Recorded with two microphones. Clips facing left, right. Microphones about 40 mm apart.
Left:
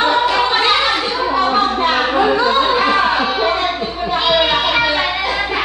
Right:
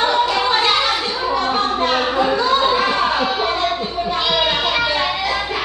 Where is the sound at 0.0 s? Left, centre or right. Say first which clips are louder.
Left 2 dB; centre.